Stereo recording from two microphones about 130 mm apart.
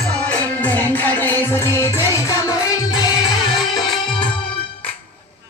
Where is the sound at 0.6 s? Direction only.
15° left (ahead or behind).